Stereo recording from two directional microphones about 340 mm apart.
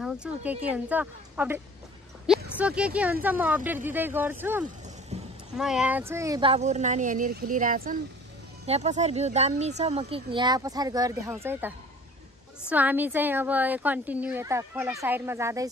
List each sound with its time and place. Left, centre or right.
0.0 s a woman's voice: centre
5.1 s clip-clop: centre
5.6 s a woman's voice: centre